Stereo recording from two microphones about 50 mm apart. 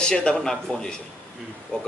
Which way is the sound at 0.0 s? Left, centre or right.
Centre.